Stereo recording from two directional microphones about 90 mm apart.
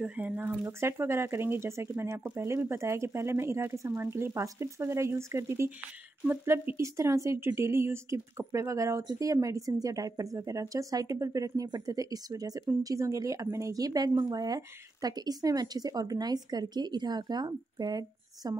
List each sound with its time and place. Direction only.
0.0 s speech: 20° right (ahead or behind); by 18.6 s 45° right (ahead or behind)